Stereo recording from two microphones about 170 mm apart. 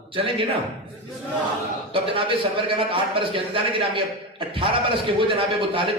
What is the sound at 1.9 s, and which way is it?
Speech, 30° right (ahead or behind).